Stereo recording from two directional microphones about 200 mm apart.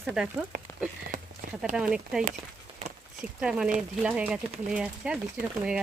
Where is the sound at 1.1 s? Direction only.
40° right (ahead or behind).